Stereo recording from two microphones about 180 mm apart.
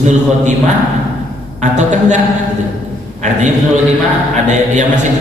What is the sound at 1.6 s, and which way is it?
Speech, 40° right (ahead or behind).